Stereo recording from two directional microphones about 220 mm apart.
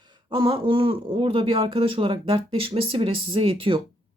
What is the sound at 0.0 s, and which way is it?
Speech, 20° right (ahead or behind).